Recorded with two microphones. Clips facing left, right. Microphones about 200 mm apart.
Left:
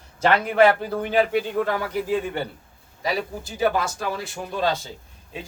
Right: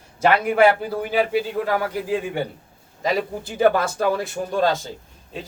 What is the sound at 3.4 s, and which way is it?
Speech, 55° right (ahead or behind).